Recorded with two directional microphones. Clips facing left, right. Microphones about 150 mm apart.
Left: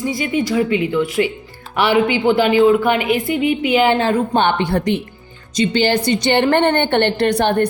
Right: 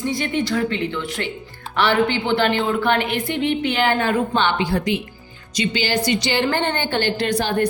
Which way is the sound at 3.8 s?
25° left (ahead or behind).